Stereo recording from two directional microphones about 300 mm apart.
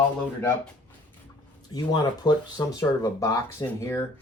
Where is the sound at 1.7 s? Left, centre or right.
Centre.